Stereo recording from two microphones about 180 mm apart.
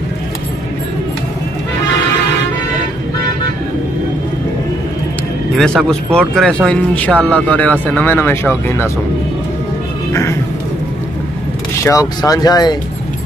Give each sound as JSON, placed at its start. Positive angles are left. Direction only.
{"t": 5.6, "sound": "speech", "side_deg": 0}
{"t": 11.8, "sound": "speech", "side_deg": 20}